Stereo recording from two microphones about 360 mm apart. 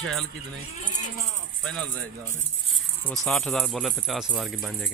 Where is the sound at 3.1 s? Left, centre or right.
Centre.